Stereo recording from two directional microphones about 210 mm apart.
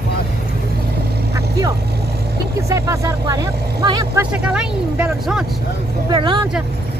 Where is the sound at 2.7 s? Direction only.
15° right (ahead or behind).